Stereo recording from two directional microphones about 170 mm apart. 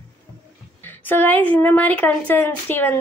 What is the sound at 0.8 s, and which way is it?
Speech, 10° left (ahead or behind).